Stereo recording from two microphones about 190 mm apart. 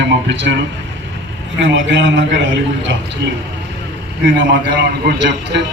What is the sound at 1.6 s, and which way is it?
A man's voice, 75° right (ahead or behind).